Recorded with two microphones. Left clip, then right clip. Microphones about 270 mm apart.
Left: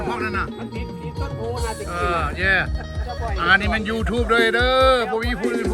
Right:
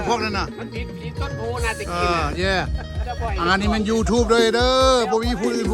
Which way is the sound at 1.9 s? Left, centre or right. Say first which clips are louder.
Even; centre.